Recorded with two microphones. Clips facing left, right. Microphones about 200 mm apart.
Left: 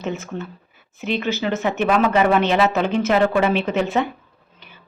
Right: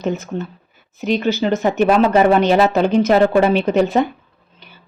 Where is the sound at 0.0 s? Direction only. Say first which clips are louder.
Right 5 dB; 35° right (ahead or behind).